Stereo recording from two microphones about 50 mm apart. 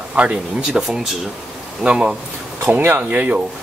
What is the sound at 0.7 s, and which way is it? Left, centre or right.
Speech, centre.